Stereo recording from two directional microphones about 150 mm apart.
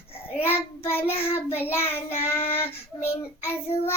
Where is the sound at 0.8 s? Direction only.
15° left (ahead or behind).